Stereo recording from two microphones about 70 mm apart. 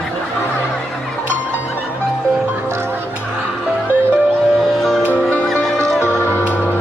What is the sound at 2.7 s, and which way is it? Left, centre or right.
Music, right.